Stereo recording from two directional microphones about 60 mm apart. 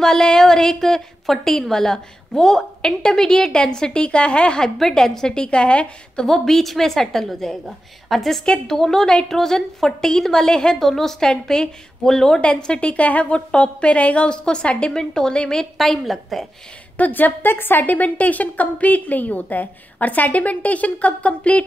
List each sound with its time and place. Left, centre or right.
0.0 s a woman's voice: centre
4.6 s a woman's voice: centre
6.2 s a woman's voice: centre
15.8 s a woman's voice: centre
16.9 s a woman's voice: left